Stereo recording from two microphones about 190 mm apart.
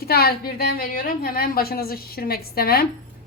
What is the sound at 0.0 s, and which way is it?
A woman's voice, 55° left (ahead or behind).